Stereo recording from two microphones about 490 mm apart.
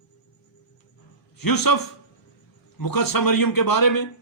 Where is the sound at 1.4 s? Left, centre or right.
Left.